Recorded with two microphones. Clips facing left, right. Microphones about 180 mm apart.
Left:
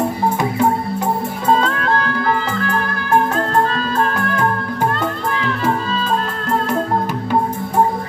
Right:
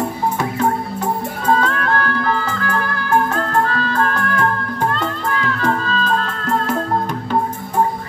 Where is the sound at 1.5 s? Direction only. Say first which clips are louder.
Left 1 dB; 25° left (ahead or behind); by 6.7 s centre (ahead or behind).